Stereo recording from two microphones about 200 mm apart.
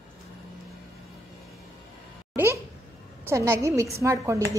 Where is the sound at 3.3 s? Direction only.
15° right (ahead or behind).